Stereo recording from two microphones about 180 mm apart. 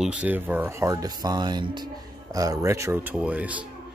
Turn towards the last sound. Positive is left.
turn(degrees=-10)  # may be behind; listen again after turning